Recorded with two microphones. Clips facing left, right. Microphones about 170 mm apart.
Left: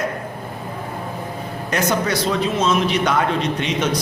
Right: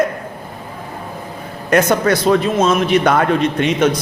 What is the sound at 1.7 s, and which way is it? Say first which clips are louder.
A man's voice: right 7 dB; 55° right (ahead or behind).